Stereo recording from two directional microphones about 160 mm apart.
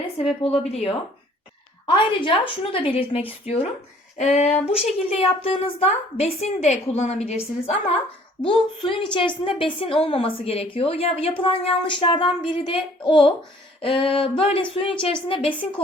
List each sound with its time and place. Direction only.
0.4 s a woman's voice: 40° left (ahead or behind)